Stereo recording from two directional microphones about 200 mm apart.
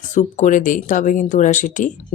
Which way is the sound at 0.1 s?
35° left (ahead or behind).